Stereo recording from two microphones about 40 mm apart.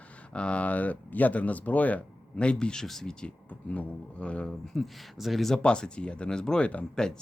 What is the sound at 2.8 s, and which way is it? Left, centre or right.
Speech, centre.